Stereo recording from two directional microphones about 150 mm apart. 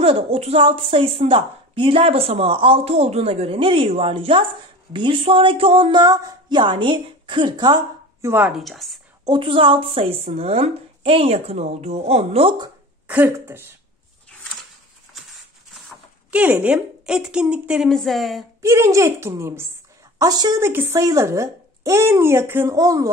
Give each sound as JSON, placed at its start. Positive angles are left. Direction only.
{"t": 0.0, "sound": "a woman's voice", "side_deg": -40}
{"t": 8.3, "sound": "a woman's voice", "side_deg": -15}
{"t": 8.5, "sound": "a woman's voice", "side_deg": 0}
{"t": 9.2, "sound": "a woman's voice", "side_deg": -30}
{"t": 13.0, "sound": "speech", "side_deg": -10}
{"t": 16.3, "sound": "a woman's voice", "side_deg": -10}
{"t": 18.6, "sound": "a woman's voice", "side_deg": -20}